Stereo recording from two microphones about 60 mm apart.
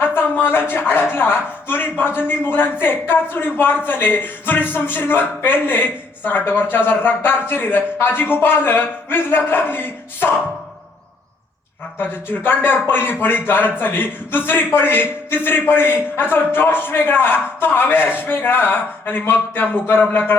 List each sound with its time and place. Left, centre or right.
0.0 s a sound: left
1.1 s a man's voice: left
11.9 s a man's voice: left